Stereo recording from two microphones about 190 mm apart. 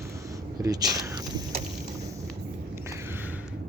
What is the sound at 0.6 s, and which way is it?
Speech, 20° right (ahead or behind).